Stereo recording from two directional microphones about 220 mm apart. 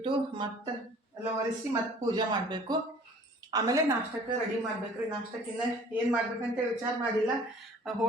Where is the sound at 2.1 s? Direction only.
20° right (ahead or behind).